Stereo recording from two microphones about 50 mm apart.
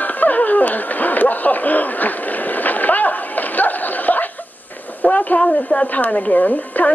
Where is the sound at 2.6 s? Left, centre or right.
Left.